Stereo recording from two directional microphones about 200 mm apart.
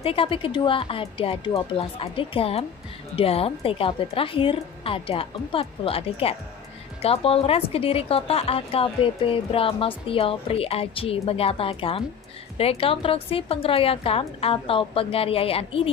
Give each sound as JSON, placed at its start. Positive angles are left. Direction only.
{"t": 0.0, "sound": "a woman's voice", "side_deg": 25}